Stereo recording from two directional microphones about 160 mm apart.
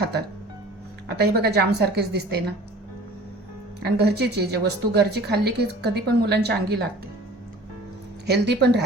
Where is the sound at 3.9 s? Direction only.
90° right.